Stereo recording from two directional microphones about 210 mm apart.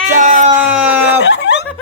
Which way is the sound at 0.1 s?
35° right (ahead or behind).